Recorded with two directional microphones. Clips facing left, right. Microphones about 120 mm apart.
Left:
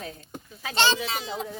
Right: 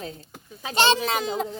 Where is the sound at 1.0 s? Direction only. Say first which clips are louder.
Right 6 dB; 45° right (ahead or behind).